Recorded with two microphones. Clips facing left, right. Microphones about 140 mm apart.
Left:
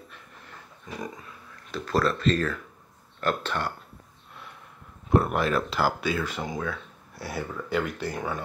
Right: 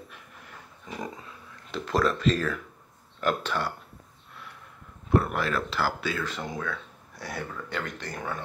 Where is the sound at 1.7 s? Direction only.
15° right (ahead or behind).